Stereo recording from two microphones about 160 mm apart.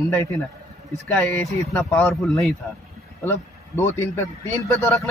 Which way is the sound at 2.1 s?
Centre (ahead or behind).